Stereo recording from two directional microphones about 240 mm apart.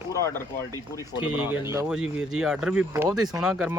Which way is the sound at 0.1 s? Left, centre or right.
Centre.